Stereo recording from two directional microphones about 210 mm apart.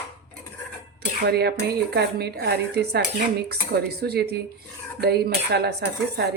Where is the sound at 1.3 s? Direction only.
50° right (ahead or behind).